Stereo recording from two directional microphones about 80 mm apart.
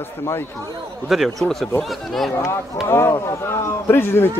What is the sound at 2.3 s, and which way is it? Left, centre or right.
A man's voice, left.